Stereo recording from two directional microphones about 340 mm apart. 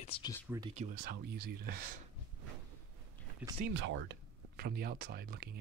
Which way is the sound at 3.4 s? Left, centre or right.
Centre.